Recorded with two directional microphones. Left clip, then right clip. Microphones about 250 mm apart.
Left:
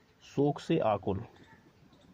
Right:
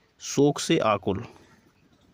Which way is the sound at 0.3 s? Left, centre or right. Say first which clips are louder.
Right 7 dB; right.